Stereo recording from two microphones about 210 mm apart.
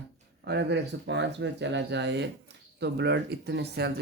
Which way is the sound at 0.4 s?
55° right (ahead or behind).